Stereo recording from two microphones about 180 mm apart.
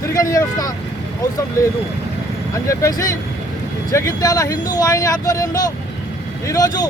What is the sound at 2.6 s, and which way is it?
Speech, 15° left (ahead or behind).